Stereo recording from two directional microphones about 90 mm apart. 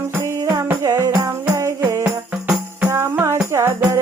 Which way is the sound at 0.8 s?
40° right (ahead or behind).